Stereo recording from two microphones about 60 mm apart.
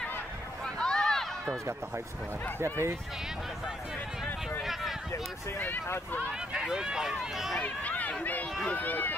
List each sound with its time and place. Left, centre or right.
0.7 s a sound: centre
2.6 s speech: right
6.5 s speech: centre
7.6 s speech: left